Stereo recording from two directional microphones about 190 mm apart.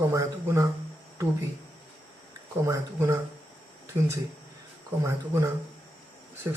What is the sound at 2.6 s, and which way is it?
Speech, 15° right (ahead or behind).